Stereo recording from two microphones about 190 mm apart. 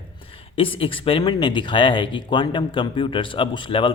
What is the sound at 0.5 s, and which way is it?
Speech, 30° left (ahead or behind).